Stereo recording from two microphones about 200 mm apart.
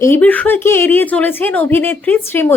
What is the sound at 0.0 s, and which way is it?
Speech, 10° left (ahead or behind).